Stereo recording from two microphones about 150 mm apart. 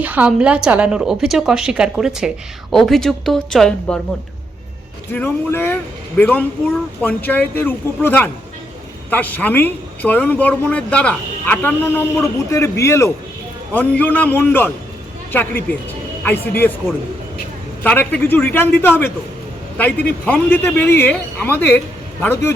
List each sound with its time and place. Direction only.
0.0 s a woman's voice: 10° right (ahead or behind)
5.1 s speech: 15° left (ahead or behind)
17.8 s speech: 10° left (ahead or behind)